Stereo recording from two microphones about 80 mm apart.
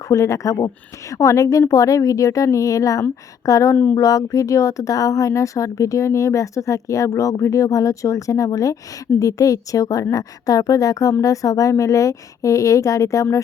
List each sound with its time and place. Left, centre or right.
0.1 s speech: left